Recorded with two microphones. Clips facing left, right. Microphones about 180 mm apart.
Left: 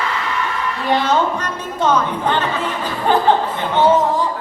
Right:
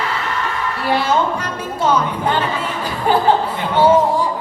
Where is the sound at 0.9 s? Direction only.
10° right (ahead or behind).